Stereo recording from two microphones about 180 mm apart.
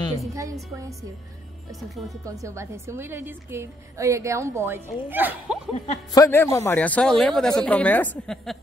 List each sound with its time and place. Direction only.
0.3 s a woman's voice: 20° right (ahead or behind)
1.8 s speech: centre (ahead or behind)
2.2 s a woman's voice: 15° right (ahead or behind)
6.1 s a man's voice: 15° left (ahead or behind)